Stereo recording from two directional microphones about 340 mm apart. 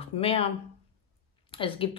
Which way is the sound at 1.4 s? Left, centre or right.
Centre.